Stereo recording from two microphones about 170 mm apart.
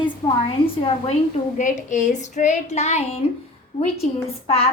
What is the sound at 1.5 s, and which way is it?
A woman's voice, 45° left (ahead or behind).